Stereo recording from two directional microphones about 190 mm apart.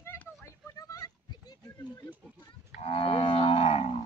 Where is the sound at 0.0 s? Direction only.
15° left (ahead or behind).